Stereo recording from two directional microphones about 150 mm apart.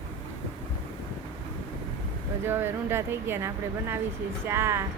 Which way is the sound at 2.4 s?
15° right (ahead or behind).